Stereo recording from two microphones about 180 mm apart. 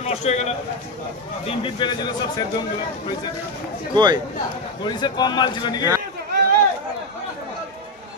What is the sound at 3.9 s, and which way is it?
Speech, 25° right (ahead or behind).